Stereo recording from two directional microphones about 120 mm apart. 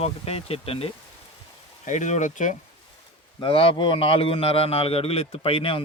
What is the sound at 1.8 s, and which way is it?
Speech, 85° left.